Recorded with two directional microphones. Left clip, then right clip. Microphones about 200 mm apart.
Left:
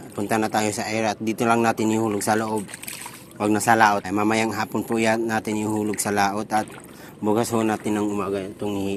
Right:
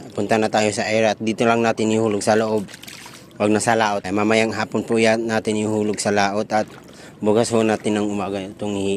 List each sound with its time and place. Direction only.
0.2 s speech: 40° right (ahead or behind)